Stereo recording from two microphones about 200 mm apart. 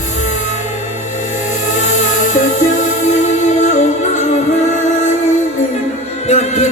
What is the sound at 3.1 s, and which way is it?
Music, 35° left (ahead or behind).